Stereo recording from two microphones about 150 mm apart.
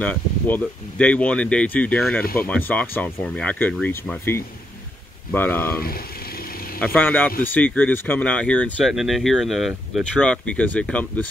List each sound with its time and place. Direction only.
0.0 s speech: 10° left (ahead or behind)
6.8 s speech: 10° left (ahead or behind)